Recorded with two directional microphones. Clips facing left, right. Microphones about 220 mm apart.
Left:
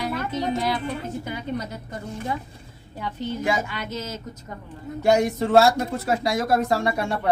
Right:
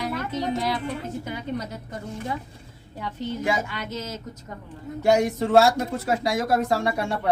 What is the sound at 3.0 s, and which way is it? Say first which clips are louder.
Speech: left 1 dB; 5° right (ahead or behind).